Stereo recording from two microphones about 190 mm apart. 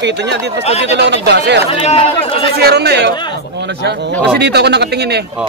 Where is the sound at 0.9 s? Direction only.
65° right (ahead or behind).